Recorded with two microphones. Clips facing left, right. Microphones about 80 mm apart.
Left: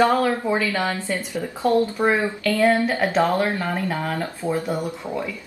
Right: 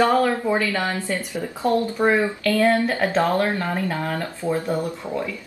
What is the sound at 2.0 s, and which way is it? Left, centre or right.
A woman's voice, centre.